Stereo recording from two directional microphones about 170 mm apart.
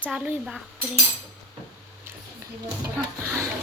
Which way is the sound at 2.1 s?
10° right (ahead or behind).